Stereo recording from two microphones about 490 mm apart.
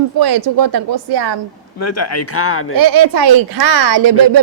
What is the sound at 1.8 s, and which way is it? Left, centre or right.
Speech, left.